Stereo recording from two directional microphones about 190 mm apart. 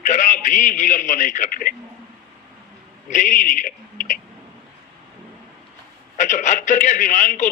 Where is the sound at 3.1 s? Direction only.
45° left (ahead or behind).